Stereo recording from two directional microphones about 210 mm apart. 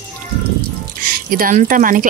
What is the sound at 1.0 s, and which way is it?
Speech, 40° right (ahead or behind).